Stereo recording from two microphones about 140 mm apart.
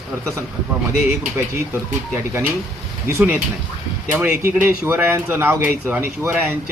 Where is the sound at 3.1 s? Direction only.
15° right (ahead or behind).